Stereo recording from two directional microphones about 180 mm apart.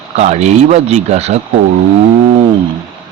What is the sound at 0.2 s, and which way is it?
Speech, 40° right (ahead or behind).